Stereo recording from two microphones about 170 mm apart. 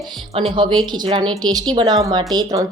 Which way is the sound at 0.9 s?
30° right (ahead or behind).